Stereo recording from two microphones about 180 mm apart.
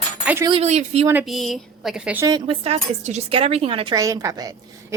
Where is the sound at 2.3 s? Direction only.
25° right (ahead or behind).